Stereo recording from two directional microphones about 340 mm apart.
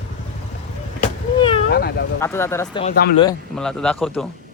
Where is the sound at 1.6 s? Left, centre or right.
Left.